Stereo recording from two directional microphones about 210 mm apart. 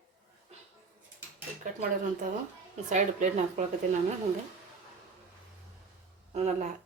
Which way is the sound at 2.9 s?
35° right (ahead or behind).